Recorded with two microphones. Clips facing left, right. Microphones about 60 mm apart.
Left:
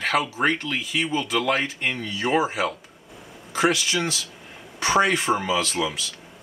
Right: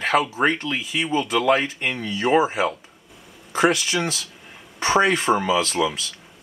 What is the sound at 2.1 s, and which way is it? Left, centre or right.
Speech, right.